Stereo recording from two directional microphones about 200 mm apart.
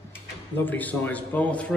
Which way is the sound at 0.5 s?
10° left (ahead or behind).